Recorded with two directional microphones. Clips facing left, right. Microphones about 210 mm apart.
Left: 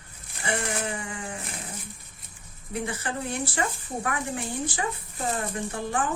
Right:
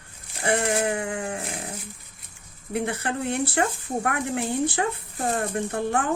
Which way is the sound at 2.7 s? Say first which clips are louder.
Right 4 dB; 60° right (ahead or behind).